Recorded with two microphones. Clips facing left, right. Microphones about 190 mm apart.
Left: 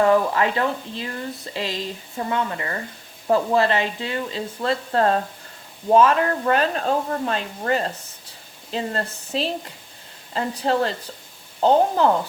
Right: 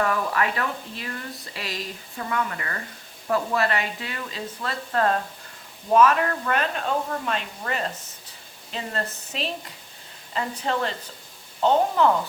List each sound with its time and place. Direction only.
0.0 s speech: 25° left (ahead or behind)